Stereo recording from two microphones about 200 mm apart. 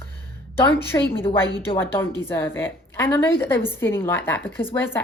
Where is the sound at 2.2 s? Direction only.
10° left (ahead or behind).